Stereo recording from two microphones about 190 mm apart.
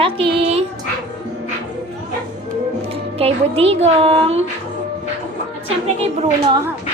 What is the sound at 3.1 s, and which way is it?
Speech, 30° right (ahead or behind).